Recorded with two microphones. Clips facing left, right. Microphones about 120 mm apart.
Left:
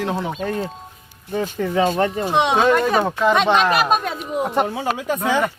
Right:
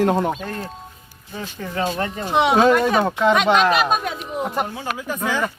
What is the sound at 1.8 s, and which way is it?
Speech, 55° left (ahead or behind).